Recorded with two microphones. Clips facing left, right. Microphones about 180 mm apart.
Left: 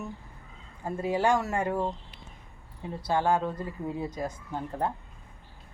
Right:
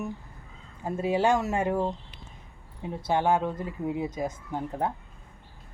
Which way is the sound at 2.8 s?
20° right (ahead or behind).